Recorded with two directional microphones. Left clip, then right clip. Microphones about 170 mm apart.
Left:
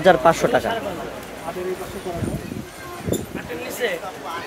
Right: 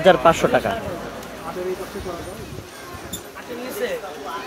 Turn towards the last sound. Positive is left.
turn(degrees=70)  # may be behind; listen again after turning